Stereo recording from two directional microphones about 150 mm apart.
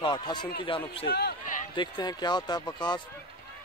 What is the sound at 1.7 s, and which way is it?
Speech, 30° left (ahead or behind).